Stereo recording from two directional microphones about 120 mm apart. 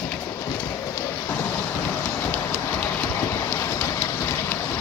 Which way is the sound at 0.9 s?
20° left (ahead or behind).